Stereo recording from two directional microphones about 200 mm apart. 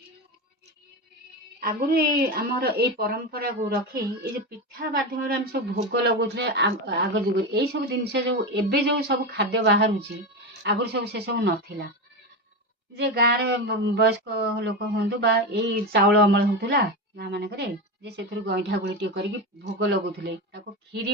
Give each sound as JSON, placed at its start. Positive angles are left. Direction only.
{"t": 1.5, "sound": "a woman's voice", "side_deg": -50}
{"t": 13.0, "sound": "speech", "side_deg": -55}